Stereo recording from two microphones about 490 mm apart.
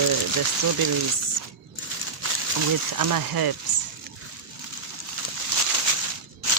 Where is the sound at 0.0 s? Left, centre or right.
Right.